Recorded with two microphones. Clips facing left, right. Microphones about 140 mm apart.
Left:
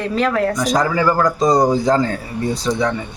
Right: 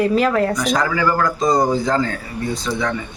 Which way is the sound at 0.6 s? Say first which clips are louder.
Left 2 dB; 35° left (ahead or behind).